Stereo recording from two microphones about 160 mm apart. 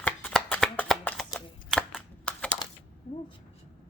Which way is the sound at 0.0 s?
10° left (ahead or behind).